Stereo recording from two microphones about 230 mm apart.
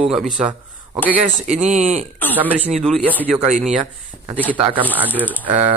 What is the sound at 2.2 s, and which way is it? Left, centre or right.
Speech, centre.